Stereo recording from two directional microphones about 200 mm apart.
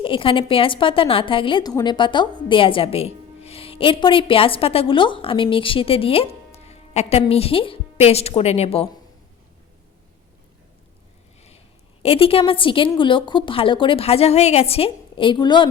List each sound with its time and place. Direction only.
0.0 s a woman's voice: 25° left (ahead or behind)
12.0 s a woman's voice: 30° left (ahead or behind)